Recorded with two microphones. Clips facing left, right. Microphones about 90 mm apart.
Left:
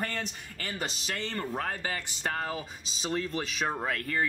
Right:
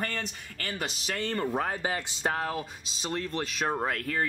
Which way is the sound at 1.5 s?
20° right (ahead or behind).